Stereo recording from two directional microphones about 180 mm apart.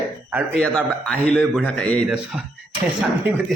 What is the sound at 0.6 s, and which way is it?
A man's voice, 5° left (ahead or behind).